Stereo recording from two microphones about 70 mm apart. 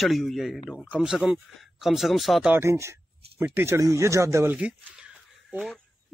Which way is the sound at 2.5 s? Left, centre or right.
Right.